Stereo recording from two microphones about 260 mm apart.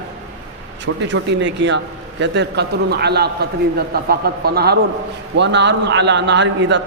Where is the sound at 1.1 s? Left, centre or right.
Right.